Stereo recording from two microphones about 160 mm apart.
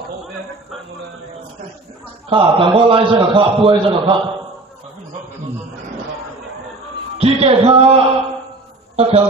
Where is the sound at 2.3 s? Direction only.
30° right (ahead or behind).